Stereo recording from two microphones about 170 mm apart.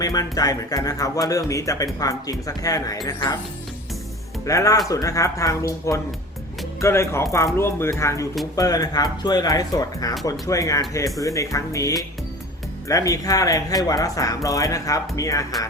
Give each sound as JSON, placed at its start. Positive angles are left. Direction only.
{"t": 0.0, "sound": "speech", "side_deg": 20}
{"t": 4.4, "sound": "speech", "side_deg": 20}